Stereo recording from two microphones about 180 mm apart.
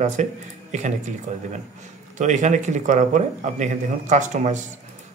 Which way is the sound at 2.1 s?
45° right (ahead or behind).